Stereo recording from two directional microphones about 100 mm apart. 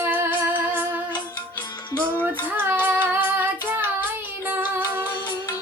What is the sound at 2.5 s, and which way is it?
Child singing, 20° right (ahead or behind).